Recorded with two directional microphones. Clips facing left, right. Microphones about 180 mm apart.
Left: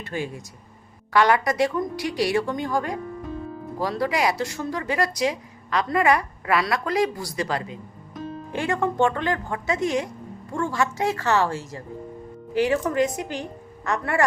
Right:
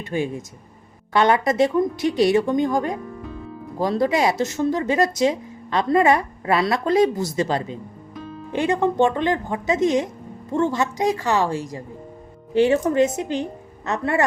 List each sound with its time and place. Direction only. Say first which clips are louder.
0.0 s a woman's voice: right 5 dB; 20° right (ahead or behind)
12.5 s speech: right 4 dB; 25° right (ahead or behind)